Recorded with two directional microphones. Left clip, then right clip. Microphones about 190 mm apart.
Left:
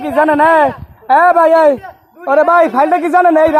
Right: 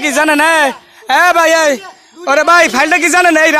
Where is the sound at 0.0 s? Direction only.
10° right (ahead or behind).